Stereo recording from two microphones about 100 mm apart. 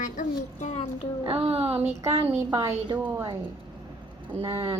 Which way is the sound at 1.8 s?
30° right (ahead or behind).